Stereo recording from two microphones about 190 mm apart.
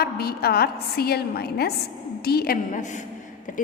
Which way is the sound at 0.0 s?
55° left (ahead or behind).